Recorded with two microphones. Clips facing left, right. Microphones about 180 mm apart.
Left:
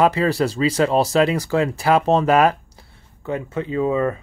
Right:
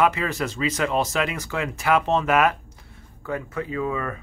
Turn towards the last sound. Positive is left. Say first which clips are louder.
# left 7 dB
turn(degrees=25)  # may be behind; listen again after turning